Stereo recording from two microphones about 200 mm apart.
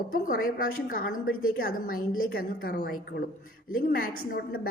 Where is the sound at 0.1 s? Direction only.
45° left (ahead or behind).